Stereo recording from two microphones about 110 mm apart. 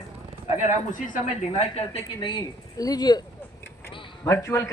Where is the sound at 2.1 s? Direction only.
40° left (ahead or behind).